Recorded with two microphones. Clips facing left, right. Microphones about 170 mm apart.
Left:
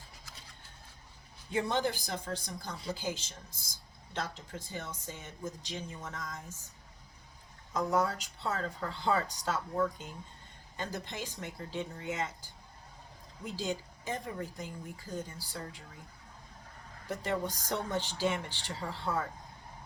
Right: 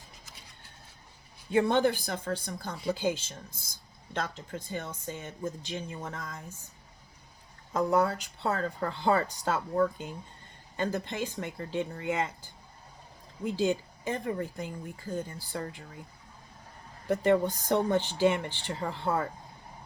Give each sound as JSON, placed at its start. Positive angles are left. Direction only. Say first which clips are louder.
{"t": 1.5, "sound": "speech", "louder": "right 7 dB", "side_deg": -60}
{"t": 7.7, "sound": "speech", "louder": "right 4 dB", "side_deg": -60}
{"t": 10.8, "sound": "speech", "louder": "right 8 dB", "side_deg": -60}
{"t": 13.6, "sound": "speech", "louder": "right 8 dB", "side_deg": -60}
{"t": 17.1, "sound": "speech", "louder": "right 9 dB", "side_deg": -55}